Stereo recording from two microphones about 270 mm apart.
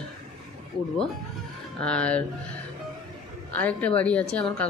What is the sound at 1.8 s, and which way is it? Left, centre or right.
Speech, centre.